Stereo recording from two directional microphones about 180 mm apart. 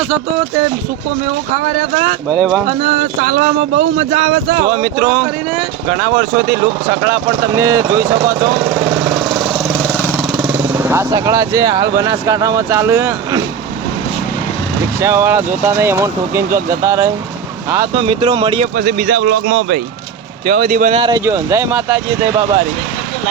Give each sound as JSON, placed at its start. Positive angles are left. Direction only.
{"t": 2.4, "sound": "speech", "side_deg": 0}
{"t": 2.6, "sound": "speech", "side_deg": -35}
{"t": 4.6, "sound": "speech", "side_deg": -15}
{"t": 8.5, "sound": "vehicle", "side_deg": 0}
{"t": 10.3, "sound": "speech", "side_deg": -5}
{"t": 15.0, "sound": "speech", "side_deg": -15}
{"t": 17.9, "sound": "speech", "side_deg": -30}
{"t": 18.8, "sound": "a man's voice", "side_deg": -60}
{"t": 20.5, "sound": "speech", "side_deg": -45}
{"t": 21.2, "sound": "speech", "side_deg": -15}